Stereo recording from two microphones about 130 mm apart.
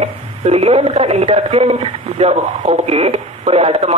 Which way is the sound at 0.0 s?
50° right (ahead or behind).